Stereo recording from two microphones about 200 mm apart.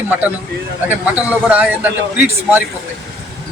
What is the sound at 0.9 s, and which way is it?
A man's voice, 5° right (ahead or behind).